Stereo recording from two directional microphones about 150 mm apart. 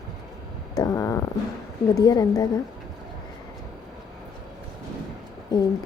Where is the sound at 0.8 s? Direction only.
25° left (ahead or behind).